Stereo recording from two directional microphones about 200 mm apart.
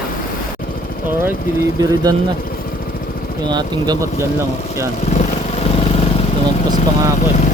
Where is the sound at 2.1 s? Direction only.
20° right (ahead or behind).